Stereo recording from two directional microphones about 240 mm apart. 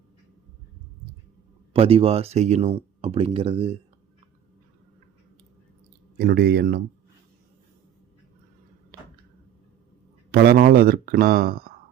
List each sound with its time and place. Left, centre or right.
1.7 s speech: right
6.1 s speech: right
8.9 s a sound: right
10.3 s speech: right